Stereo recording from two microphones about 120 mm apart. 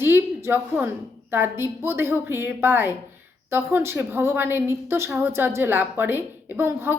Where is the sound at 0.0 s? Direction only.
20° right (ahead or behind).